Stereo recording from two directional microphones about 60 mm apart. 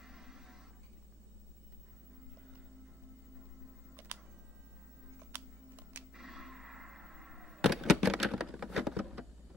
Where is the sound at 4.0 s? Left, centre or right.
Right.